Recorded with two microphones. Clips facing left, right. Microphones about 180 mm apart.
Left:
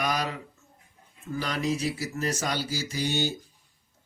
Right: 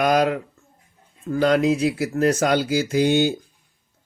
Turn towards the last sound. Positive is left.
turn(degrees=-55)  # may be behind; listen again after turning